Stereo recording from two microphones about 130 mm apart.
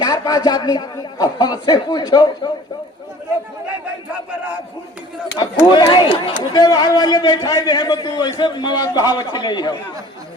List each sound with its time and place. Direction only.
0.0 s a man's voice: 30° left (ahead or behind)
5.4 s a man's voice: 35° left (ahead or behind)